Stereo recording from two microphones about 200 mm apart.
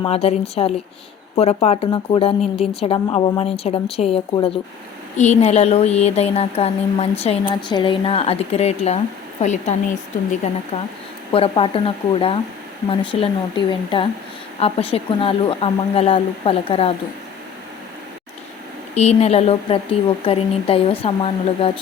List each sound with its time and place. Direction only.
0.0 s a woman's voice: 30° left (ahead or behind)
11.3 s speech: 25° left (ahead or behind)
12.9 s speech: 25° left (ahead or behind)
18.9 s speech: 30° left (ahead or behind)